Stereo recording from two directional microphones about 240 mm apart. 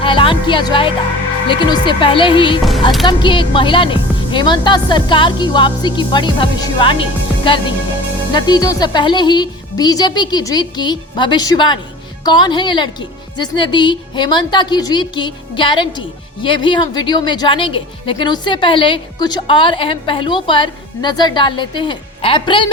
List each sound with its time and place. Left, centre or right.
0.0 s a woman's voice: left
8.3 s a woman's voice: centre